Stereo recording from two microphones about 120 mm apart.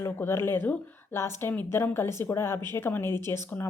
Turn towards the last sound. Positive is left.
turn(degrees=20)  # may be behind; listen again after turning